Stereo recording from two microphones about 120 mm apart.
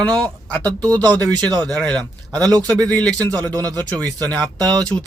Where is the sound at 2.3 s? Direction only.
35° right (ahead or behind).